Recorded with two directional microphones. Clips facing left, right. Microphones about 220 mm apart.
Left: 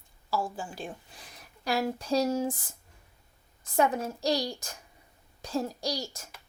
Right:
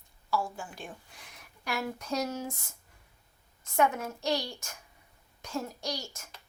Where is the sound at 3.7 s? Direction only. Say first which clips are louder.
Left 2 dB; 35° left (ahead or behind).